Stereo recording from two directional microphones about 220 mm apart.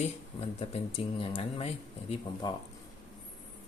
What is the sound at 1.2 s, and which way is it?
Speech, 25° left (ahead or behind).